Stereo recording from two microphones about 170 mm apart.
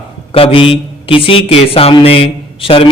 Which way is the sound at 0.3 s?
30° left (ahead or behind).